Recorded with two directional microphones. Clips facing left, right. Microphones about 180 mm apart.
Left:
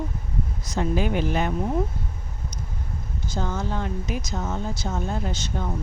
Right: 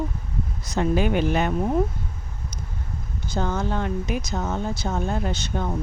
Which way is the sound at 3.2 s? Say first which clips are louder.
Right 3 dB; 60° right (ahead or behind).